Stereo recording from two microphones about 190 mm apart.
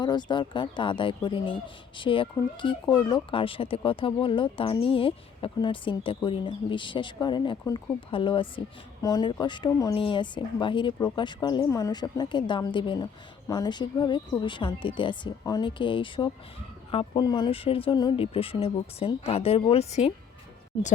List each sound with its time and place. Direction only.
0.0 s speech: 25° left (ahead or behind)
7.6 s speech: 10° left (ahead or behind)
8.1 s speech: 25° left (ahead or behind)